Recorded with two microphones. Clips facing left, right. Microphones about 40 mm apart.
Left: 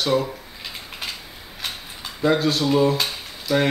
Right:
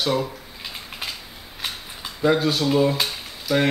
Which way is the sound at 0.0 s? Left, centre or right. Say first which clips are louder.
Left 2 dB; centre.